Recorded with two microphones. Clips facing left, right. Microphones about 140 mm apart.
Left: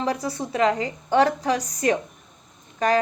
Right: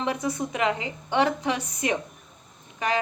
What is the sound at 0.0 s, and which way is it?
A woman's voice, 35° left (ahead or behind).